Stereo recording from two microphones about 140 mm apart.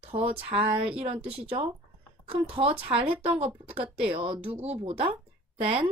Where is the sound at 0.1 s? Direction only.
45° right (ahead or behind).